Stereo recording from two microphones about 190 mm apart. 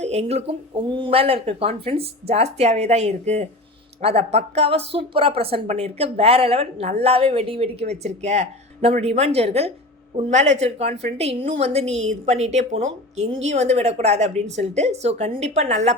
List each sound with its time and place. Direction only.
0.0 s speech: 35° right (ahead or behind)